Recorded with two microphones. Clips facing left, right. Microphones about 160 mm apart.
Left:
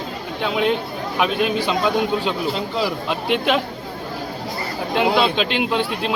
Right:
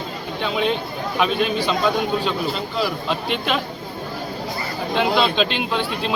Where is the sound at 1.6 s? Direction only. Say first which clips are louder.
Left 1 dB; 15° left (ahead or behind).